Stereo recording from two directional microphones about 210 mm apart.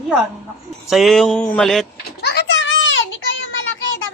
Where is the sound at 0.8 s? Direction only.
Centre (ahead or behind).